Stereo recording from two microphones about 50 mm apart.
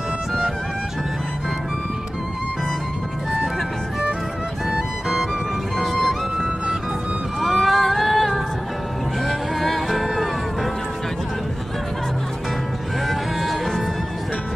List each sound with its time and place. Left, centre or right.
4.6 s music: centre
5.8 s music: centre
13.1 s music: centre